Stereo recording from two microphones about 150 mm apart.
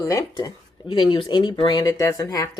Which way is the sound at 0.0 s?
20° left (ahead or behind).